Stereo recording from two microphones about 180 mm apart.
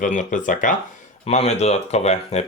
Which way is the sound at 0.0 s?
45° left (ahead or behind).